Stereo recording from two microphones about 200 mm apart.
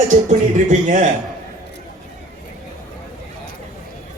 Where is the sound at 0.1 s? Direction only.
35° right (ahead or behind).